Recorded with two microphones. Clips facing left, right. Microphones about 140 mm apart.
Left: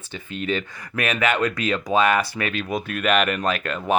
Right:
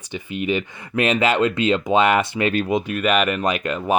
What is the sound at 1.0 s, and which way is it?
Speech, 25° right (ahead or behind).